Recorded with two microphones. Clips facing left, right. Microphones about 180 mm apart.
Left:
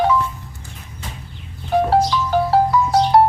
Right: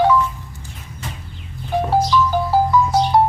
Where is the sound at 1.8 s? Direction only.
70° left (ahead or behind).